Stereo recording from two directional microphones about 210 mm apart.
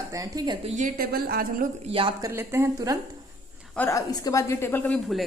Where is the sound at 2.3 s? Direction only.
10° right (ahead or behind).